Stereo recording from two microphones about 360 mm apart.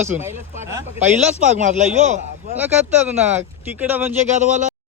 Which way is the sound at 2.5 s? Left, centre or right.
Centre.